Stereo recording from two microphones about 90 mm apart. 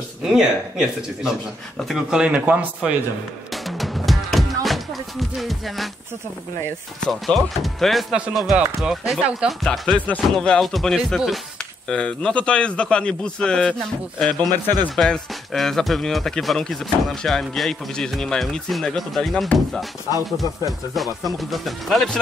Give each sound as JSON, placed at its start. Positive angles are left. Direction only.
{"t": 0.2, "sound": "speech", "side_deg": -5}
{"t": 3.6, "sound": "music", "side_deg": 0}
{"t": 5.4, "sound": "speech", "side_deg": 0}
{"t": 7.1, "sound": "speech", "side_deg": 0}
{"t": 9.5, "sound": "speech", "side_deg": 5}
{"t": 9.9, "sound": "a man's voice", "side_deg": 15}
{"t": 14.4, "sound": "a man's voice", "side_deg": -45}
{"t": 15.0, "sound": "speech", "side_deg": 5}
{"t": 21.4, "sound": "speech", "side_deg": 0}